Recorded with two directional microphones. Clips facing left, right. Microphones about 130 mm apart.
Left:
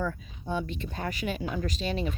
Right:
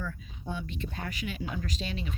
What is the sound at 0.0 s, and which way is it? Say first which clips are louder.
Speech: left 6 dB; 40° left (ahead or behind).